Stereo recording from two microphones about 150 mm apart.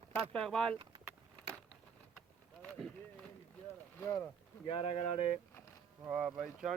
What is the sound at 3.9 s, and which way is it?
Speech, 20° left (ahead or behind).